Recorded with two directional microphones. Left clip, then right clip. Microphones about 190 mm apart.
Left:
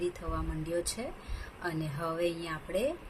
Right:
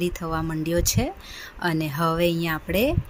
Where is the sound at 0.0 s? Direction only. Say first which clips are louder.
Right 9 dB; 50° right (ahead or behind).